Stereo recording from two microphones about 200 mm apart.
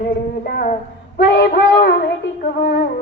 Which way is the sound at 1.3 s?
55° left (ahead or behind).